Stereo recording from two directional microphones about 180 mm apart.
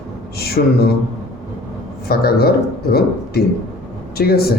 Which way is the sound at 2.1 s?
60° left (ahead or behind).